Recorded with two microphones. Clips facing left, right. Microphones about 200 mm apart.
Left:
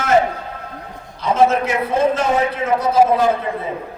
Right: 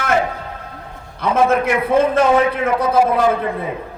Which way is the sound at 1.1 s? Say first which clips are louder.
Even; 55° right (ahead or behind).